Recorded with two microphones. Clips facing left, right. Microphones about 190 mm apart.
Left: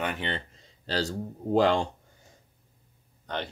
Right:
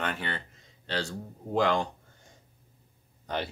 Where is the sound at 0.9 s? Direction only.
35° left (ahead or behind).